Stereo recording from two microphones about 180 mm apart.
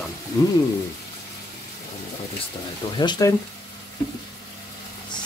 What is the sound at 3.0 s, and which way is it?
Speech, 20° left (ahead or behind).